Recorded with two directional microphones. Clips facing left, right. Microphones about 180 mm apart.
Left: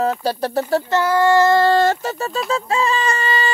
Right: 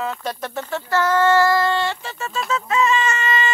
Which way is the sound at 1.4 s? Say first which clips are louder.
Left 5 dB; 30° left (ahead or behind).